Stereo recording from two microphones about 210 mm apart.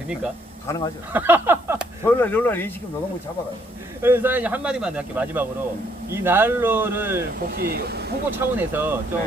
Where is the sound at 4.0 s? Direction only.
10° right (ahead or behind).